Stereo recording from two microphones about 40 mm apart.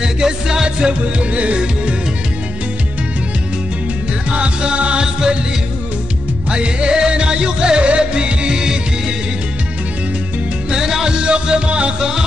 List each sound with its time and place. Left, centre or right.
0.0 s music: centre
4.3 s music: right
6.5 s music: right
10.7 s music: centre
12.0 s music: centre